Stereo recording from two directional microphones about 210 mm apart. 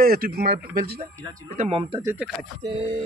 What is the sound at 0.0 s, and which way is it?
Speech, 45° right (ahead or behind).